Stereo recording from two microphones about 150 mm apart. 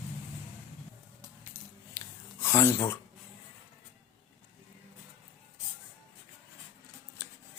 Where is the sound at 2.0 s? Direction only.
20° left (ahead or behind).